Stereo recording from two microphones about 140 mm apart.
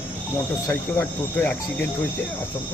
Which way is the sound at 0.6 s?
15° left (ahead or behind).